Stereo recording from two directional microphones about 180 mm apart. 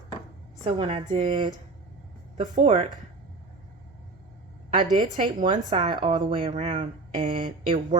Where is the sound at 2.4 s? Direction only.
40° right (ahead or behind).